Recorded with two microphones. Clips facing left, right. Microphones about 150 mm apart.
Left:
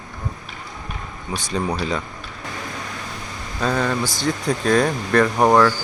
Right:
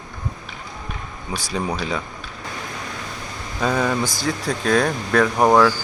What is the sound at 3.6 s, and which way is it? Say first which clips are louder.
Speech: right 1 dB; 5° right (ahead or behind).